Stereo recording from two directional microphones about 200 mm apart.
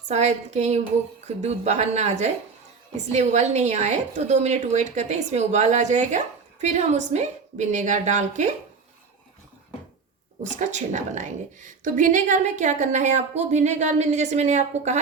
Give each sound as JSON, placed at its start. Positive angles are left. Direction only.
{"t": 0.1, "sound": "a woman's voice", "side_deg": -35}
{"t": 10.6, "sound": "a woman's voice", "side_deg": -35}